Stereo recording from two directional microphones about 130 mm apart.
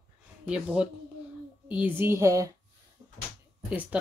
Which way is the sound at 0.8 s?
5° right (ahead or behind).